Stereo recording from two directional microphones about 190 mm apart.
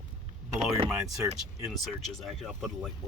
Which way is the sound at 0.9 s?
10° right (ahead or behind).